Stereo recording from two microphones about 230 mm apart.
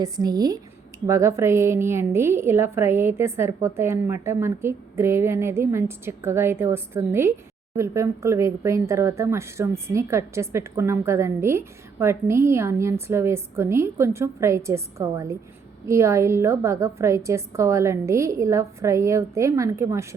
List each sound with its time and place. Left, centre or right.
0.0 s speech: centre